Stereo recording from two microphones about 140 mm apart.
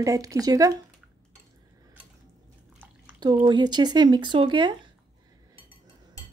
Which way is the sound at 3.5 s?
30° right (ahead or behind).